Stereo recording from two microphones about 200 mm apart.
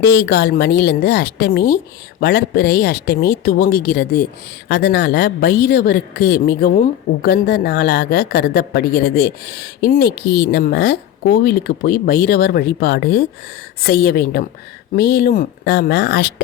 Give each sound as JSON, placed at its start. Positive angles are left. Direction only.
{"t": 0.0, "sound": "a woman's voice", "side_deg": 55}